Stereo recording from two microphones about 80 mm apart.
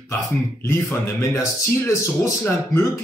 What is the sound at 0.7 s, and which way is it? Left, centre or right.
Speech, left.